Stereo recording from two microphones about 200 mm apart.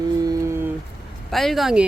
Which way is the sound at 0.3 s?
15° right (ahead or behind).